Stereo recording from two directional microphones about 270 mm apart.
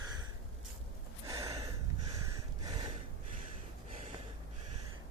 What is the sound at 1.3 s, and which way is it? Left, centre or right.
Gasp, centre.